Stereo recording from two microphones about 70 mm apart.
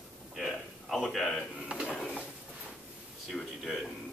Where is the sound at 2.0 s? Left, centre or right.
Centre.